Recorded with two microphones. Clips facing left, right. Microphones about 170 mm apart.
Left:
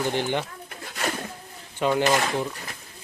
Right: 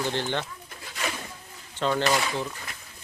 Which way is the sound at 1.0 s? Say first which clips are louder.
Left 4 dB; 55° left (ahead or behind).